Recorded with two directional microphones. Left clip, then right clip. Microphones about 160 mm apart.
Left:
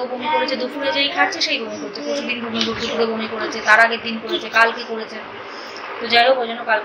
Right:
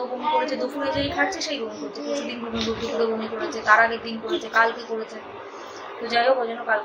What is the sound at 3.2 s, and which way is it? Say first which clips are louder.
A woman's voice: left 4 dB; 5° left (ahead or behind).